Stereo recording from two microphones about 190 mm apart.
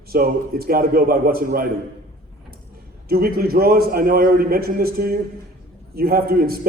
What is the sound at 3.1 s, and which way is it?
A man's voice, 50° right (ahead or behind).